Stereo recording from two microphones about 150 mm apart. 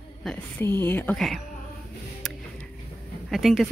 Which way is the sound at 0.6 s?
15° left (ahead or behind).